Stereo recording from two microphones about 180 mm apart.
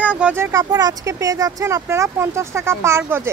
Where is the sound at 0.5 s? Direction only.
20° right (ahead or behind).